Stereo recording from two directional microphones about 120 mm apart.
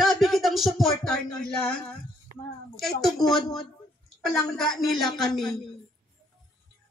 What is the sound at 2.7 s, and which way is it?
Speech, 5° left (ahead or behind).